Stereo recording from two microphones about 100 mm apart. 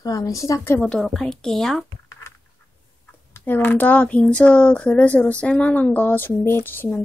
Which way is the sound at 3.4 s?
20° left (ahead or behind).